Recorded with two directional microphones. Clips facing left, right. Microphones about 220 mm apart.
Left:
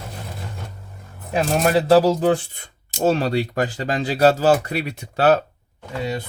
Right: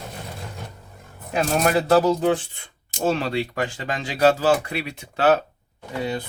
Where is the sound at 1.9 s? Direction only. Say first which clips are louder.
Left 3 dB; 30° left (ahead or behind).